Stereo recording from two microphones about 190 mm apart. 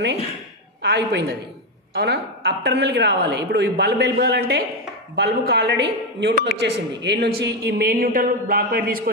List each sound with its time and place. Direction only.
0.8 s a woman's voice: 55° right (ahead or behind)